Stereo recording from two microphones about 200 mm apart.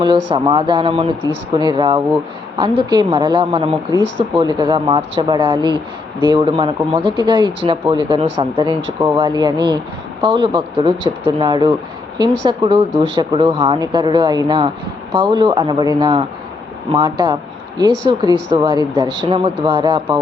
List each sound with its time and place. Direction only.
0.0 s speech: 25° right (ahead or behind)